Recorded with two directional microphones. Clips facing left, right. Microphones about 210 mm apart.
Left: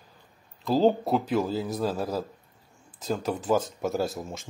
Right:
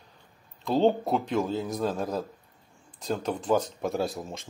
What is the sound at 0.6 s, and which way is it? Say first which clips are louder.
Speech: left 1 dB; centre (ahead or behind).